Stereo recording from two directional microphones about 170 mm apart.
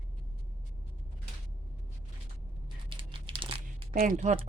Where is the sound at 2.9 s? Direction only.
30° right (ahead or behind).